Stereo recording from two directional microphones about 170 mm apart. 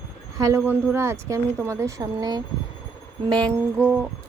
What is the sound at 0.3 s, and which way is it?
Speech, 15° right (ahead or behind).